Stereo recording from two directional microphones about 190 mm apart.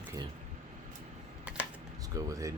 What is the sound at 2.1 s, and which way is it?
Speech, 15° right (ahead or behind).